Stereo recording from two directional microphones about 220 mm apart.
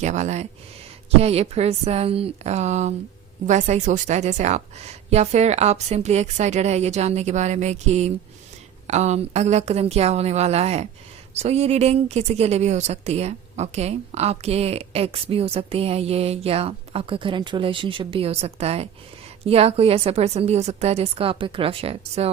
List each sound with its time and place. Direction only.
0.0 s a woman's voice: 30° right (ahead or behind)